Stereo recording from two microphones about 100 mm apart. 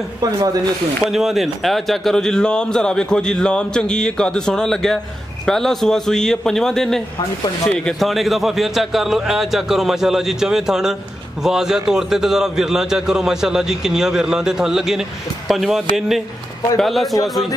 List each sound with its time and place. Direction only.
0.2 s speech: 40° right (ahead or behind)
1.1 s a man's voice: centre (ahead or behind)